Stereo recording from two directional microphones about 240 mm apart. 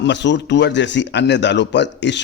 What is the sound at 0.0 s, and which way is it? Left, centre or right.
Speech, left.